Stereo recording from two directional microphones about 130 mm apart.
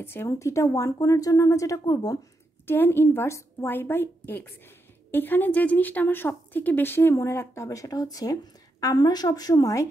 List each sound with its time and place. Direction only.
0.0 s a woman's voice: 15° left (ahead or behind)